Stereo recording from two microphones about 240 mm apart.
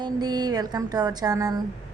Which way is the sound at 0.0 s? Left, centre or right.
Centre.